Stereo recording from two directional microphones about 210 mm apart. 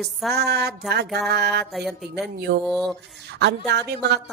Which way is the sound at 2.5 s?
50° right (ahead or behind).